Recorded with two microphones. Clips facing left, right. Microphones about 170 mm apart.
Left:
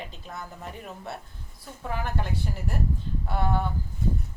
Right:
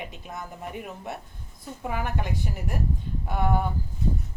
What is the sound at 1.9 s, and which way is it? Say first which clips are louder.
Speech: right 1 dB; 10° right (ahead or behind).